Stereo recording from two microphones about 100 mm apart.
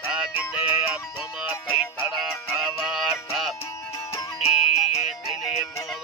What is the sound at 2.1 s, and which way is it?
Music, 5° right (ahead or behind).